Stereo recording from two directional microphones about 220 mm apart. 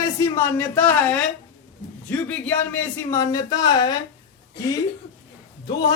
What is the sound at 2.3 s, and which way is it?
A man's voice, 5° left (ahead or behind).